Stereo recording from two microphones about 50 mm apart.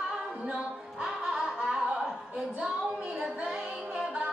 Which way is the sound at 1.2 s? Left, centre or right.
Centre.